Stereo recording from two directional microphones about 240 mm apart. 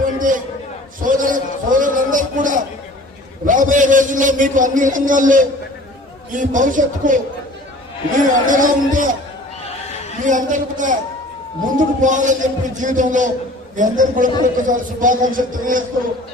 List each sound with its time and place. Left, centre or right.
0.2 s a sound: right
6.3 s a man's voice: right
10.2 s a man's voice: right
12.0 s a man's voice: right